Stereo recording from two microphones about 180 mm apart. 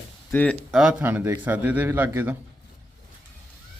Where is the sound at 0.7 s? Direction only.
5° right (ahead or behind).